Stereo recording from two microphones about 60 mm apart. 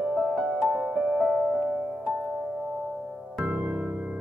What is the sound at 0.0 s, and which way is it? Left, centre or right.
Music, centre.